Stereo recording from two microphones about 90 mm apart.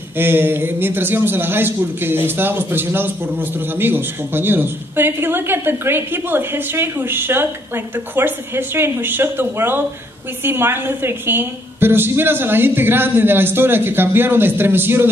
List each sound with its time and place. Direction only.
0.2 s a man's voice: 25° right (ahead or behind)